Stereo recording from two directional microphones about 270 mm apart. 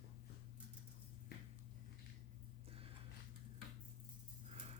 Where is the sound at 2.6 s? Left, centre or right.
Right.